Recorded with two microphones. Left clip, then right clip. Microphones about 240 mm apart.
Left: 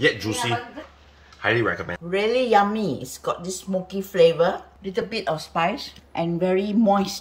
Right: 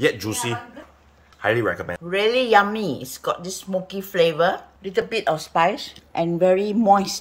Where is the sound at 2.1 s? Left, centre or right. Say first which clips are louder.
Right 2 dB; centre; by 7.2 s right.